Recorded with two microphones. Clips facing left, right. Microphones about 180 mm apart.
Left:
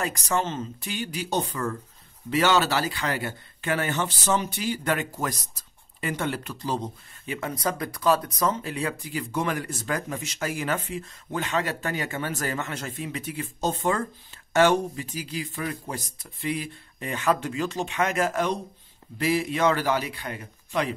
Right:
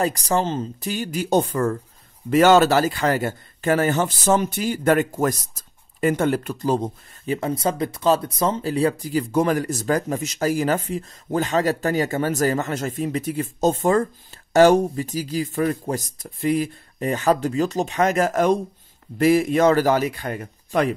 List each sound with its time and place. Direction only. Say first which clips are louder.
0.0 s a man's voice: right 6 dB; 35° right (ahead or behind)
7.2 s a man's voice: right 6 dB; 30° right (ahead or behind); by 20.9 s 50° right (ahead or behind)